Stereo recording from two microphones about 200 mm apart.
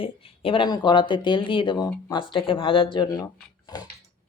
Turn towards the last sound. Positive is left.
turn(degrees=20)  # may be behind; listen again after turning